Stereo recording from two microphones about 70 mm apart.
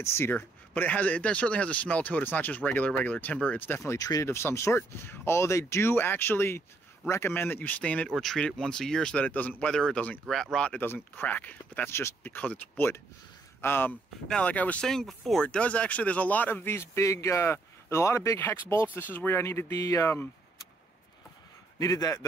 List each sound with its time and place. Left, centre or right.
0.0 s speech: left
4.0 s a man's voice: left
4.3 s a man's voice: left; by 8.1 s centre
8.1 s speech: centre
9.2 s speech: left
9.7 s speech: centre
10.2 s speech: centre
10.7 s speech: left
11.9 s speech: left
14.2 s speech: centre
14.9 s speech: centre
15.4 s a man's voice: centre; by 18.9 s left
18.9 s a man's voice: left
21.7 s a man's voice: left